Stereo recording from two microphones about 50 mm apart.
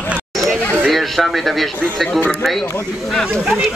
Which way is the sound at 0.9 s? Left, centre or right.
Centre.